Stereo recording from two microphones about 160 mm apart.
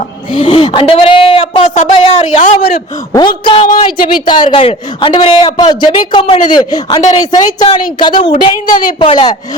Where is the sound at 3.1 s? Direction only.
25° left (ahead or behind).